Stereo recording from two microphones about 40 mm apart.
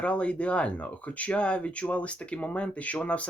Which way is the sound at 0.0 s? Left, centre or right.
Left.